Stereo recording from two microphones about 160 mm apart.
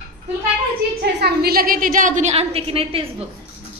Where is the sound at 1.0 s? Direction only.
90° right; by 3.1 s 35° right (ahead or behind).